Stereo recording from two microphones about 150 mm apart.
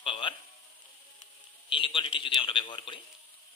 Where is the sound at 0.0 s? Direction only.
35° left (ahead or behind).